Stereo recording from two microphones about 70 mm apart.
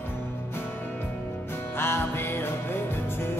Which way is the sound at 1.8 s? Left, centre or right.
Left.